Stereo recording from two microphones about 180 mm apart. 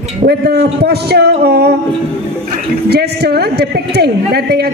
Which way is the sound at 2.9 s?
65° right (ahead or behind).